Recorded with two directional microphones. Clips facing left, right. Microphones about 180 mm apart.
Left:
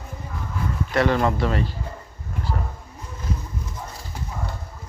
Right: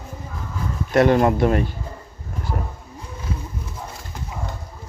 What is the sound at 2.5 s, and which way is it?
Roaring cats, 30° right (ahead or behind).